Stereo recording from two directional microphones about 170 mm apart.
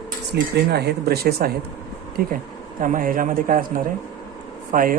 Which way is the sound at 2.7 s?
50° right (ahead or behind).